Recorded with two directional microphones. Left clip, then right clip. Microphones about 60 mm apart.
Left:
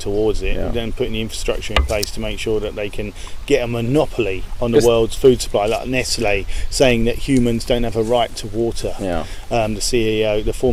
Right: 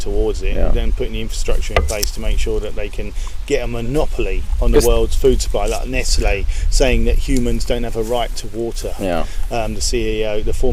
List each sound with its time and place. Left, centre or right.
0.1 s speech: centre
9.0 s speech: right
9.5 s speech: left